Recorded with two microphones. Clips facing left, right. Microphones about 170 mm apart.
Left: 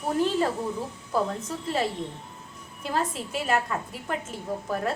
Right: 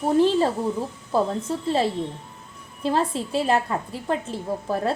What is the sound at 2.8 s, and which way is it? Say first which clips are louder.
A woman's voice: right 6 dB; 30° right (ahead or behind).